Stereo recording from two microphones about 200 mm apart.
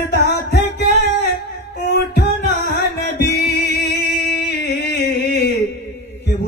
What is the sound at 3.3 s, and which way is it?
Music, 55° left (ahead or behind).